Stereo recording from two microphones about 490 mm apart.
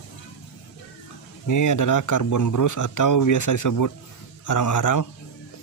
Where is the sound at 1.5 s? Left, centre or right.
Left.